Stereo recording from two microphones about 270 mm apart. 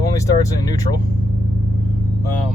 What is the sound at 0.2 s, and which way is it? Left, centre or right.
Speech, centre.